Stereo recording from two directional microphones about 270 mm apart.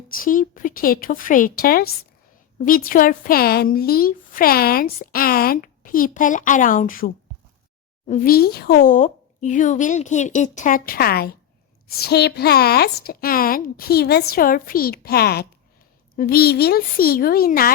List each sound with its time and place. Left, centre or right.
0.1 s a woman's voice: left